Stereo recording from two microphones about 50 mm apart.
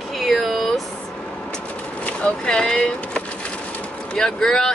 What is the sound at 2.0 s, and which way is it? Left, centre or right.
Speech, left.